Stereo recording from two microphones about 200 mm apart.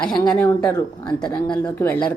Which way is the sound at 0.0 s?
5° left (ahead or behind).